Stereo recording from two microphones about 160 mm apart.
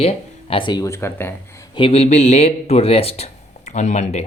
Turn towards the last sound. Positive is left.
turn(degrees=45)  # may be behind; listen again after turning